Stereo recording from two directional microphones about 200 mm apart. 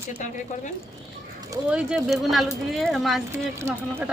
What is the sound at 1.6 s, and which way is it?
Speech, 5° right (ahead or behind).